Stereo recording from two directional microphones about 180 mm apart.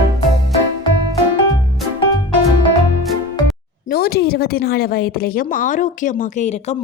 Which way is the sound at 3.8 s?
60° left (ahead or behind).